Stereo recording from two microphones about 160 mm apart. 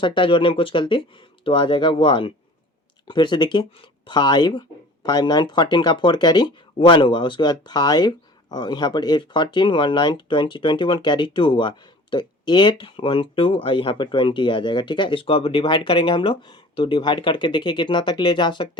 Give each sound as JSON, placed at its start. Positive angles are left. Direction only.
{"t": 0.0, "sound": "speech", "side_deg": 30}